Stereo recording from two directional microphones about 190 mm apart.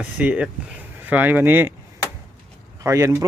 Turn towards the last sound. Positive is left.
turn(degrees=-15)  # may be behind; listen again after turning